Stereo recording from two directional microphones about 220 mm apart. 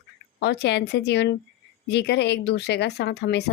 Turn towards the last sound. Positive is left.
turn(degrees=50)  # may be behind; listen again after turning